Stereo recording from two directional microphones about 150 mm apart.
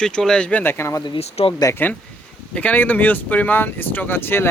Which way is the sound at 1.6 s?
10° left (ahead or behind).